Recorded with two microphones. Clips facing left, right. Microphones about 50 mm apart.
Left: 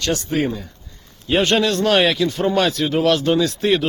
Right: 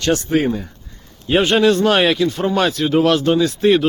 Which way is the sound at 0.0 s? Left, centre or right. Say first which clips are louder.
Right 4 dB; right.